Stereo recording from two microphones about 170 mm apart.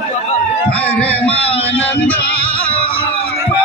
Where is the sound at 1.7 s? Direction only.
10° left (ahead or behind).